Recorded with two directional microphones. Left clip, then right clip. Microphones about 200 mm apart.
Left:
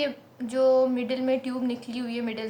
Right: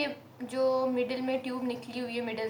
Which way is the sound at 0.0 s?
40° left (ahead or behind).